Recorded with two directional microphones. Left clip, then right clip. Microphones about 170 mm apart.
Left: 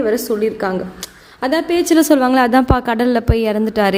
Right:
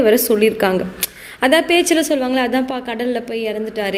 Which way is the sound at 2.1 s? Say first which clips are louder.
Left 5 dB; 40° left (ahead or behind).